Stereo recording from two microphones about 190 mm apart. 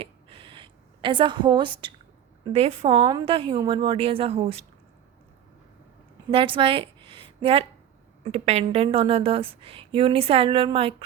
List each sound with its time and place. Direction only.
0.0 s a sound: 30° right (ahead or behind)
2.5 s a woman's voice: 30° right (ahead or behind)
6.3 s a woman's voice: 30° right (ahead or behind)